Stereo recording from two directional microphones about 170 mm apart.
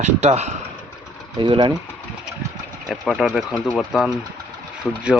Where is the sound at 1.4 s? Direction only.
30° right (ahead or behind).